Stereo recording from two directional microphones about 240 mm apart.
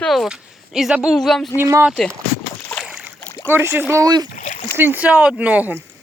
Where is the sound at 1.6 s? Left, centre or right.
Centre.